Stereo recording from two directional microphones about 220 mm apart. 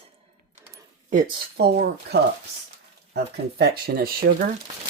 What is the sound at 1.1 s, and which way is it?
Speech, 40° right (ahead or behind).